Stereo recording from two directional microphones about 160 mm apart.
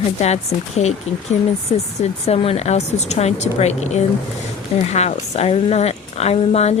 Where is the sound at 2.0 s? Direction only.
40° left (ahead or behind).